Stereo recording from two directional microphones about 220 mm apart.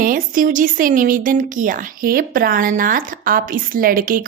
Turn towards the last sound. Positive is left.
turn(degrees=-40)  # may be behind; listen again after turning